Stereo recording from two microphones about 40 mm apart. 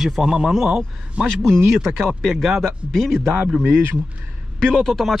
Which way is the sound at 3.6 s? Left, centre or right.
Right.